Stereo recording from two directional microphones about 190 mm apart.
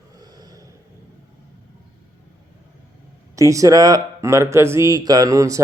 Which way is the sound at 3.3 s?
15° right (ahead or behind).